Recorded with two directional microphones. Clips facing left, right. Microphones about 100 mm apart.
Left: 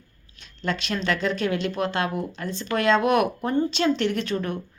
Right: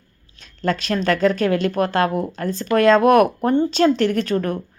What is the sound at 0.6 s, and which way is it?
A woman's voice, 40° right (ahead or behind).